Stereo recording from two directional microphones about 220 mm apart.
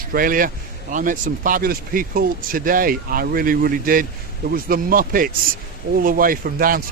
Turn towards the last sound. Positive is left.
turn(degrees=-40)  # may be behind; listen again after turning